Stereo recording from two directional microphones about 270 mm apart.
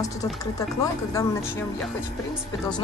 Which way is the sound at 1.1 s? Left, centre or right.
Centre.